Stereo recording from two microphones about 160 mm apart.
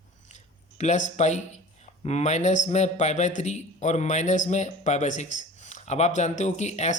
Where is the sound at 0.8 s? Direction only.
50° left (ahead or behind).